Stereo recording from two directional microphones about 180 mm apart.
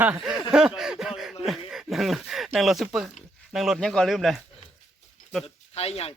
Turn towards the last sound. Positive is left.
turn(degrees=35)  # may be behind; listen again after turning